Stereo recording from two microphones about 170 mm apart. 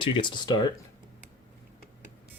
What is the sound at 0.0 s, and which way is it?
Speech, 30° left (ahead or behind).